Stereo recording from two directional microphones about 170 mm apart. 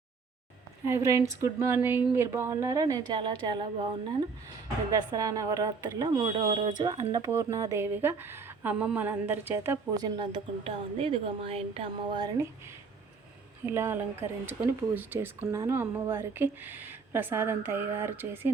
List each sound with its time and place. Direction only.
0.9 s speech: 15° right (ahead or behind)
5.1 s speech: 20° right (ahead or behind)
10.0 s a woman's voice: 25° right (ahead or behind)
13.7 s speech: 15° right (ahead or behind)